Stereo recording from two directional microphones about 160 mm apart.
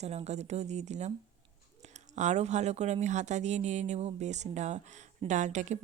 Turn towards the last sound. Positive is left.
turn(degrees=-50)  # may be behind; listen again after turning